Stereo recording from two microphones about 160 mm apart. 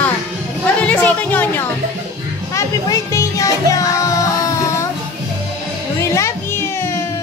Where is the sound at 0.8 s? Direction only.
10° left (ahead or behind).